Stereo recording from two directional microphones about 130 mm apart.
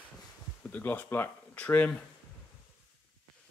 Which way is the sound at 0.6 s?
10° left (ahead or behind).